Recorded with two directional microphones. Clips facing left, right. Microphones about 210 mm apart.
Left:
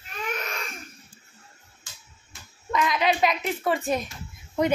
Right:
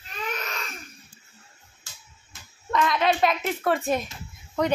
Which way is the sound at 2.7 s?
Centre (ahead or behind).